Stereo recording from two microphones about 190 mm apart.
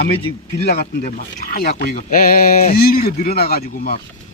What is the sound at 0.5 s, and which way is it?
Speech, 55° left (ahead or behind).